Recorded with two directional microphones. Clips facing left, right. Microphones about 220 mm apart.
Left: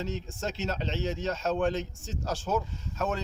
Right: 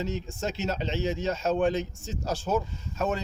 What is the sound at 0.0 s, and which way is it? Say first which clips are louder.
Speech: right 3 dB; 10° right (ahead or behind).